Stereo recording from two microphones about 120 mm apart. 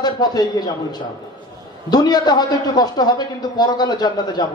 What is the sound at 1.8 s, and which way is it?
A man's voice, 35° left (ahead or behind).